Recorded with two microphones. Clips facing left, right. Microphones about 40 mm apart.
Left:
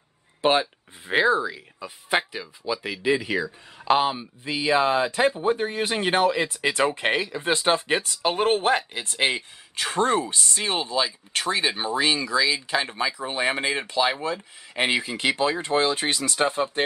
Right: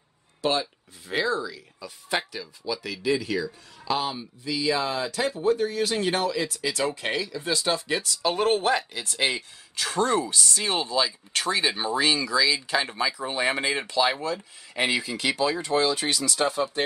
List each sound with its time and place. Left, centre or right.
0.4 s speech: left; by 12.9 s centre
12.9 s speech: left